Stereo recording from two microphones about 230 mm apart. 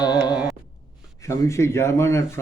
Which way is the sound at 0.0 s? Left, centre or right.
Centre.